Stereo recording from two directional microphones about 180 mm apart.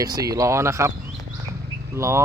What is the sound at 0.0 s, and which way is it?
Speech, 20° right (ahead or behind).